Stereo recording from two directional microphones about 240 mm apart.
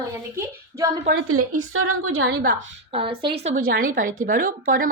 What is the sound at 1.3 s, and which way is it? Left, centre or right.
A woman's voice, right.